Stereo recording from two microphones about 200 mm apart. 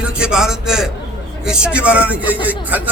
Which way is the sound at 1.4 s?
5° right (ahead or behind).